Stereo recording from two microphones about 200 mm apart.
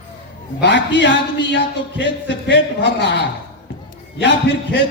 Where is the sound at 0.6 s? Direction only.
60° left (ahead or behind).